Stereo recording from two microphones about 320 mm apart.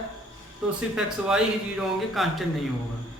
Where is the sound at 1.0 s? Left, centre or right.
Centre.